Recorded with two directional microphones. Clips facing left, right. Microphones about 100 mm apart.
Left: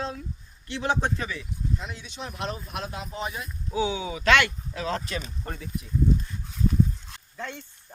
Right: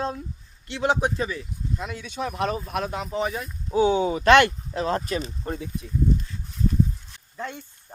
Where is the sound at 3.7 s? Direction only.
45° right (ahead or behind).